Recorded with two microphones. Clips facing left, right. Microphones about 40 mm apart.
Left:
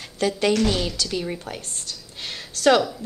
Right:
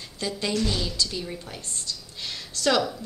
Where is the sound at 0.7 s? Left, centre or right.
Left.